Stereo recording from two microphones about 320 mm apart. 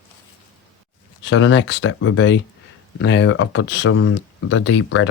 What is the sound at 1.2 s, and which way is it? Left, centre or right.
Speech, left.